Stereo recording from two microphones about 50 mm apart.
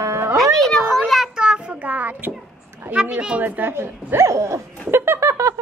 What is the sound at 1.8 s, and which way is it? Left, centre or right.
A woman's voice, right.